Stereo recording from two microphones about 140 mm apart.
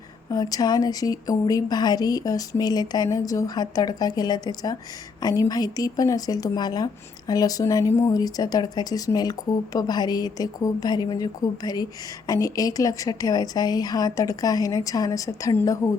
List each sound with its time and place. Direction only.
0.3 s speech: 25° left (ahead or behind)